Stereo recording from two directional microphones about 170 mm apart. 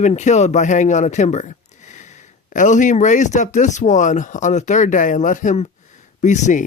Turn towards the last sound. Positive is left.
turn(degrees=45)  # may be behind; listen again after turning